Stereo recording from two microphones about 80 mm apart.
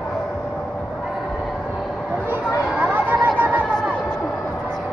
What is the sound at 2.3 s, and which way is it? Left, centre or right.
Chatter, right.